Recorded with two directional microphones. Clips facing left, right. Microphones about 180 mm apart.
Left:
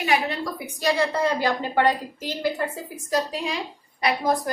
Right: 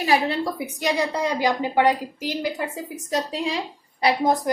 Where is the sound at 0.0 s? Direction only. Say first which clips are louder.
Right 3 dB; 30° right (ahead or behind); by 2.5 s 15° right (ahead or behind).